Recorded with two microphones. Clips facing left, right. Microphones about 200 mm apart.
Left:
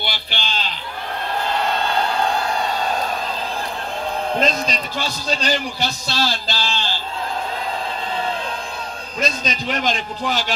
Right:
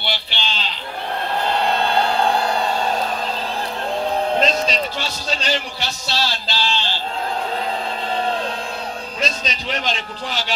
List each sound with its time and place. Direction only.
0.0 s a sound: 45° left (ahead or behind)
4.4 s a man's voice: 45° left (ahead or behind)
9.2 s a man's voice: 45° left (ahead or behind)